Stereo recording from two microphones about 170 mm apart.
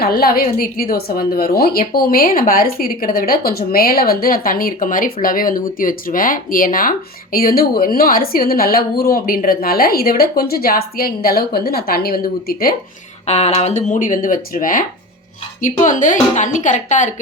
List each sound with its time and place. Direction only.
0.0 s speech: 60° left (ahead or behind)
13.2 s speech: 40° left (ahead or behind)